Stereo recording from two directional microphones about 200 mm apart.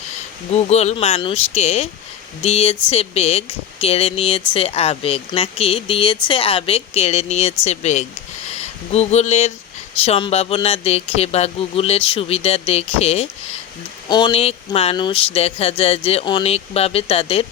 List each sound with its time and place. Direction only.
0.5 s speech: 35° left (ahead or behind)